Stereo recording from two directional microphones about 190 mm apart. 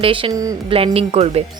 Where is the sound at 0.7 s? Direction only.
30° right (ahead or behind).